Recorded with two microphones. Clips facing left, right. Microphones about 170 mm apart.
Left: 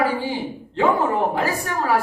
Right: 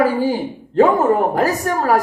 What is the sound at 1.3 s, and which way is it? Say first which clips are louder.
Speech: right 5 dB; 45° right (ahead or behind).